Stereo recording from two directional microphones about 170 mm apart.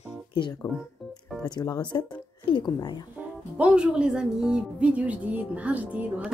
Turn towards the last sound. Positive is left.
turn(degrees=-10)  # may be behind; listen again after turning